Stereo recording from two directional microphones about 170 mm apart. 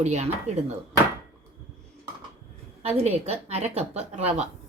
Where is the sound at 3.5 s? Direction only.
40° right (ahead or behind).